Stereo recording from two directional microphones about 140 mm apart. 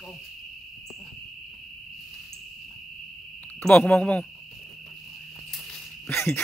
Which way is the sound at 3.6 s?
10° left (ahead or behind).